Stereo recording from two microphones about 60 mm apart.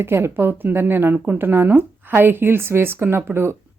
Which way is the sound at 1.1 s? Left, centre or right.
Right.